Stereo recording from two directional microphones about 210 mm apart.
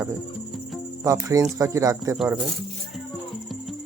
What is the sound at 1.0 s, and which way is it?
Speech, 15° right (ahead or behind).